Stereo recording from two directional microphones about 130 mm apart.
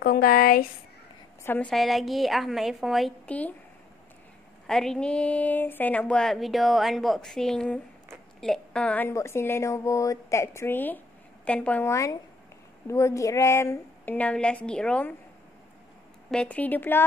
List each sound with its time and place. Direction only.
0.3 s speech: 90° left
1.4 s a woman's voice: 15° left (ahead or behind)
1.7 s speech: centre (ahead or behind)
4.6 s a woman's voice: 5° left (ahead or behind)
11.9 s a woman's voice: 25° left (ahead or behind); by 15.1 s 10° left (ahead or behind)
16.3 s a woman's voice: 10° left (ahead or behind)